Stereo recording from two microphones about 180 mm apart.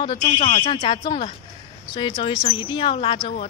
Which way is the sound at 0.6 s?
25° left (ahead or behind).